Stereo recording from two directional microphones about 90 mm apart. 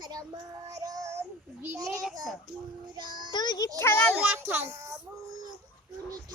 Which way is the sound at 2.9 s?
55° right (ahead or behind).